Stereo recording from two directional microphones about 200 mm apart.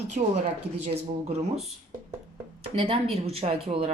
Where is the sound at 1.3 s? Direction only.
30° right (ahead or behind).